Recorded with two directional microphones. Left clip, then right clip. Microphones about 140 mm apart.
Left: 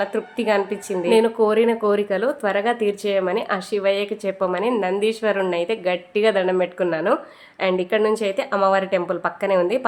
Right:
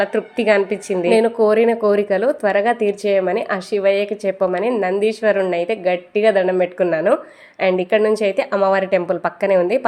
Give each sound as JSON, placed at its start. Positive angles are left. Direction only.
{"t": 0.0, "sound": "a woman's voice", "side_deg": -30}